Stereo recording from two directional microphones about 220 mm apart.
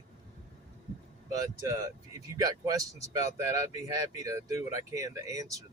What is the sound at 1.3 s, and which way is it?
Speech, 15° right (ahead or behind).